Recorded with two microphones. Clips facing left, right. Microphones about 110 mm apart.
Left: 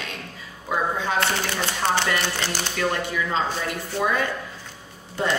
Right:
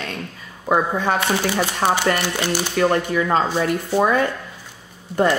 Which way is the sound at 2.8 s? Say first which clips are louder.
Right 7 dB; 50° right (ahead or behind).